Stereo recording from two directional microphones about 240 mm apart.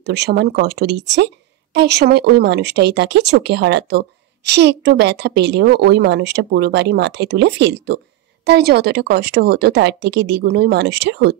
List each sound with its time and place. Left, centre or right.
0.0 s a woman's voice: right